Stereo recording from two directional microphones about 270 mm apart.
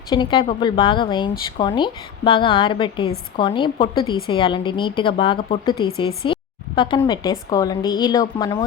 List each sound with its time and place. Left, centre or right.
0.1 s speech: centre